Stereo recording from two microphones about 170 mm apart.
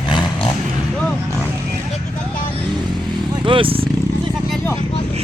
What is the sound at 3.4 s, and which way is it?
Vehicle, 30° right (ahead or behind).